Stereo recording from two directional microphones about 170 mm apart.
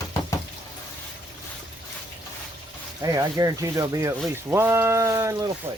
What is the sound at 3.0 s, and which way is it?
Speech, 20° right (ahead or behind).